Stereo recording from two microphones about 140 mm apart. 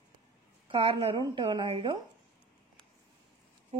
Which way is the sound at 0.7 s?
40° right (ahead or behind).